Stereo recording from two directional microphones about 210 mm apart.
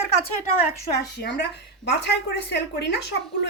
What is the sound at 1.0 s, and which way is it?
A woman's voice, 50° left (ahead or behind).